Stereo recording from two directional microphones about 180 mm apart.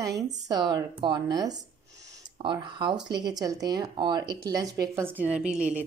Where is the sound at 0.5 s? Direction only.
25° right (ahead or behind).